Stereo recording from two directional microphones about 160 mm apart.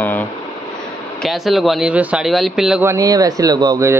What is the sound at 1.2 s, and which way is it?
Speech, centre (ahead or behind).